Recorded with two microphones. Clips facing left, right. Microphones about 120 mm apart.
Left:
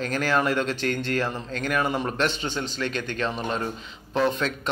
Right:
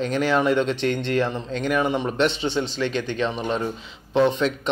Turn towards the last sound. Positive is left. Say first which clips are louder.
# right 4 dB
turn(degrees=-20)  # may be behind; listen again after turning